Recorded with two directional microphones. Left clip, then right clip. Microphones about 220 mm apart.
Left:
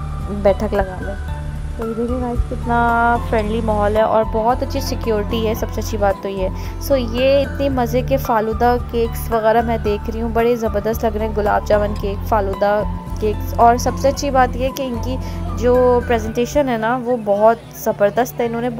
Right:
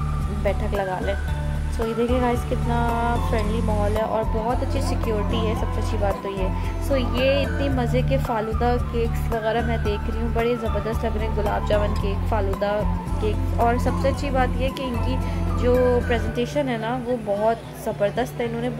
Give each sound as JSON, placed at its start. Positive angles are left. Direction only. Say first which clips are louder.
{"t": 0.4, "sound": "a woman's voice", "louder": "left 10 dB", "side_deg": 30}
{"t": 1.8, "sound": "speech", "louder": "even", "side_deg": 0}
{"t": 2.7, "sound": "a woman's voice", "louder": "left 10 dB", "side_deg": 15}
{"t": 5.6, "sound": "a woman's voice", "louder": "left 7 dB", "side_deg": 5}